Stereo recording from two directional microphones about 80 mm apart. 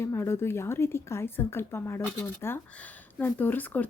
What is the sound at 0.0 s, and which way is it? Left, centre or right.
A woman's voice, left.